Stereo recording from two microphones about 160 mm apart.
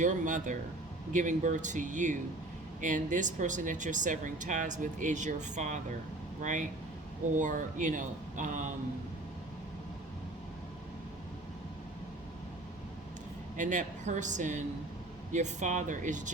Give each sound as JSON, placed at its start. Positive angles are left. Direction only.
{"t": 0.0, "sound": "speech", "side_deg": -55}
{"t": 13.6, "sound": "speech", "side_deg": -50}